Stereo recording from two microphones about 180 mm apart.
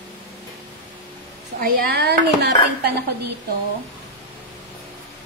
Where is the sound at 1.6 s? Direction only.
60° right (ahead or behind).